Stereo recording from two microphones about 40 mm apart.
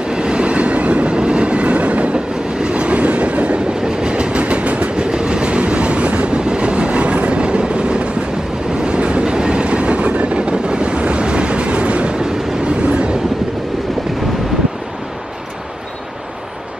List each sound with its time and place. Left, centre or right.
0.1 s train: right